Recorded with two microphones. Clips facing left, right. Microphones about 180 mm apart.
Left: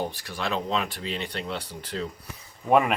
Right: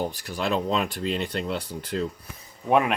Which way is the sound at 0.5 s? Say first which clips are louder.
Right 3 dB; 45° right (ahead or behind).